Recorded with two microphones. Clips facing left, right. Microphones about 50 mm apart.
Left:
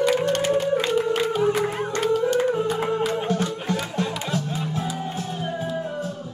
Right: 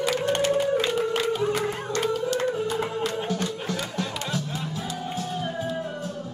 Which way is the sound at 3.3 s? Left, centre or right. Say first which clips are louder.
Left 4 dB; left.